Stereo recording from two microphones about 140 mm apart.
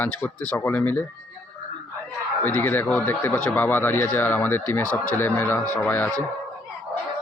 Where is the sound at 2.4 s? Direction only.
15° left (ahead or behind).